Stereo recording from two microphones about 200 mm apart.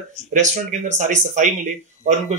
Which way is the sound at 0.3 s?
40° right (ahead or behind).